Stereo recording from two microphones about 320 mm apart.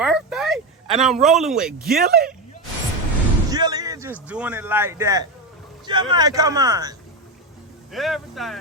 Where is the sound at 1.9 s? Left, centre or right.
Right.